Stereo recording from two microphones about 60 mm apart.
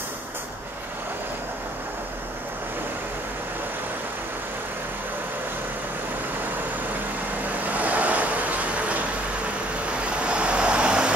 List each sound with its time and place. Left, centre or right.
7.6 s vehicle: right